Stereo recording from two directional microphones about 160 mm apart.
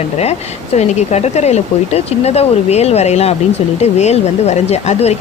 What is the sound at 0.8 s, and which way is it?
Speech, 45° left (ahead or behind).